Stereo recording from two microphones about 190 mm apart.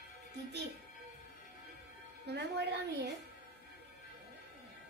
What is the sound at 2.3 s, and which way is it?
Speech, 60° right (ahead or behind).